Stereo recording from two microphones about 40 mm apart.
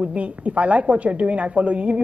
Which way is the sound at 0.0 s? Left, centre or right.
Right.